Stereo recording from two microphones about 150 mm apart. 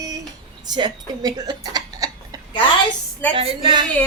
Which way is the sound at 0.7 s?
30° right (ahead or behind).